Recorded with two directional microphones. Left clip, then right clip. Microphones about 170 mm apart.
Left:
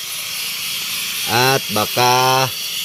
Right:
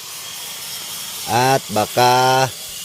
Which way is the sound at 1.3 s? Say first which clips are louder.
Even; 25° right (ahead or behind).